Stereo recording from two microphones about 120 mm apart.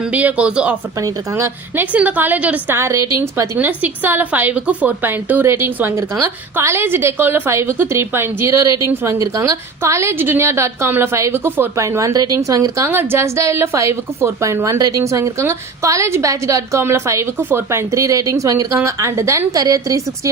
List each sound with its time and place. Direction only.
0.1 s speech: 10° right (ahead or behind)
1.0 s a woman's voice: 20° right (ahead or behind)